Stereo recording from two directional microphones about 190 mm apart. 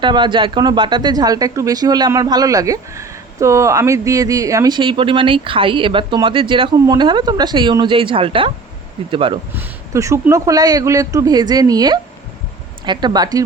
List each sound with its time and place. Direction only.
0.0 s speech: 25° right (ahead or behind)
9.6 s speech: 15° right (ahead or behind)